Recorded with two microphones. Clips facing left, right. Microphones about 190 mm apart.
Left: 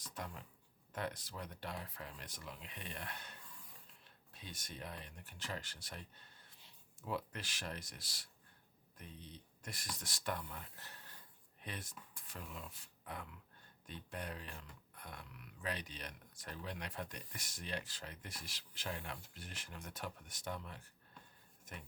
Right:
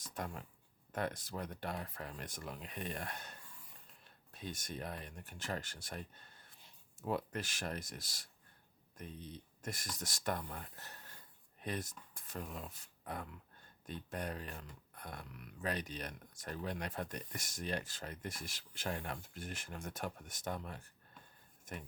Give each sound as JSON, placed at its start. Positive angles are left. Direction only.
{"t": 0.1, "sound": "speech", "side_deg": -50}